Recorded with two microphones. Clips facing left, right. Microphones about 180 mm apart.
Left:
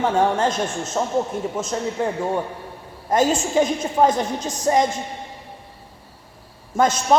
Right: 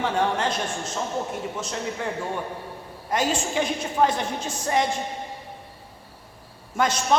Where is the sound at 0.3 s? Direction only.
45° left (ahead or behind).